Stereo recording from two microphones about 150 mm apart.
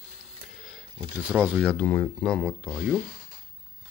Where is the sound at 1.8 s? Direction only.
15° left (ahead or behind).